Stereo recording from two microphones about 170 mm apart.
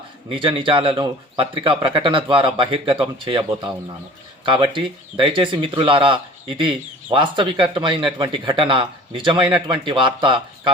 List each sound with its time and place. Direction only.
0.3 s speech: 30° right (ahead or behind)